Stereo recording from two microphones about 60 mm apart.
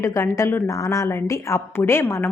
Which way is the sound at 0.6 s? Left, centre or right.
Left.